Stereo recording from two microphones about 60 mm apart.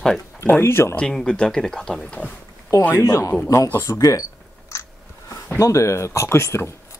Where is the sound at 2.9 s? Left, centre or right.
Left.